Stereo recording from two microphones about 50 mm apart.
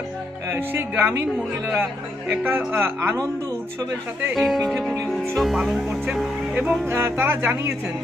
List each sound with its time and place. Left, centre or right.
0.5 s speech: right
2.3 s speech: right
4.4 s speech: centre
6.5 s speech: right
6.8 s speech: right